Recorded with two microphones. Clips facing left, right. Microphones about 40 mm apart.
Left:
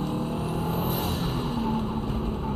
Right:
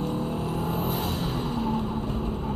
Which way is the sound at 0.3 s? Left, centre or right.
Left.